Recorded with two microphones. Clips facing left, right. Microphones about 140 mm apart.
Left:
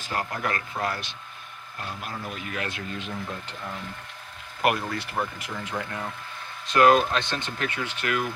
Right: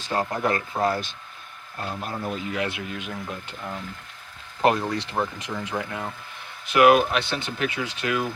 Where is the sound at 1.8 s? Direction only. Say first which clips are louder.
Right 5 dB; 35° right (ahead or behind).